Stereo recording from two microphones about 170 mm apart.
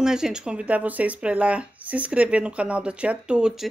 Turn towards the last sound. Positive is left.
turn(degrees=-5)  # may be behind; listen again after turning